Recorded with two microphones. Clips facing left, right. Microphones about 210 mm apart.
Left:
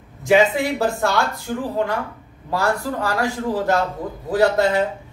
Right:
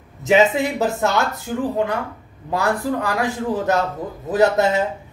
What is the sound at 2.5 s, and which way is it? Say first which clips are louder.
A man's voice: right 1 dB; 20° right (ahead or behind).